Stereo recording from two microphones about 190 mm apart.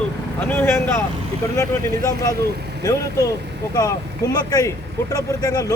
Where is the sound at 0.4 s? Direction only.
10° left (ahead or behind).